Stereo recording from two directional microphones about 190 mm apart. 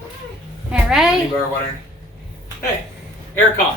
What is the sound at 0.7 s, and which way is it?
Speech, 5° right (ahead or behind).